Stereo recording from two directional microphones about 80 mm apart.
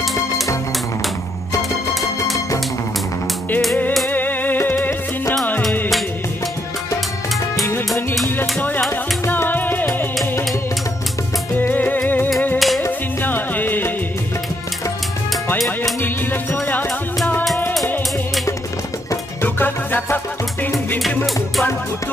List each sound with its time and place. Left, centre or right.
4.1 s music: left
8.4 s music: left
11.5 s music: left
12.5 s music: centre
13.2 s music: left
15.5 s music: centre
16.0 s music: left
19.4 s music: left